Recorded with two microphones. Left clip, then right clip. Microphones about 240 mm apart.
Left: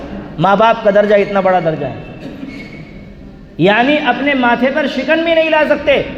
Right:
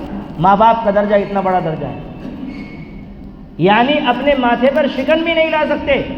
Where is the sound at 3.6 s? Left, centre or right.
Left.